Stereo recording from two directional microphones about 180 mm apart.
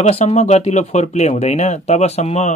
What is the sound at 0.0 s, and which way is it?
Speech, 35° left (ahead or behind).